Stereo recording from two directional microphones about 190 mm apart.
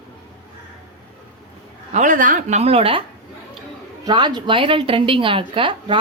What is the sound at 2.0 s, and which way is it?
A woman's voice, 40° right (ahead or behind).